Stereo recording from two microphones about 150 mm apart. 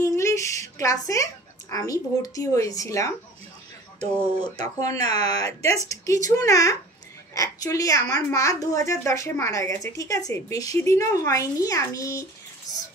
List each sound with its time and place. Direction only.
0.0 s a woman's voice: 20° left (ahead or behind)
4.0 s speech: 15° right (ahead or behind)
4.6 s a woman's voice: 25° left (ahead or behind)